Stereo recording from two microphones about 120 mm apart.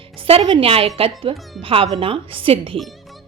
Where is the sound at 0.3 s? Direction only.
45° right (ahead or behind).